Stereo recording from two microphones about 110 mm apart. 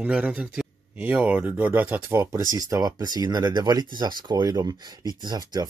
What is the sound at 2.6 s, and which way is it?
Speech, 35° right (ahead or behind).